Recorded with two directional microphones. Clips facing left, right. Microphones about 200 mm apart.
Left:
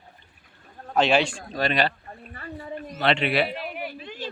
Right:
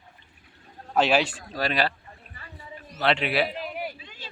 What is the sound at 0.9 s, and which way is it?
Speech, 5° right (ahead or behind).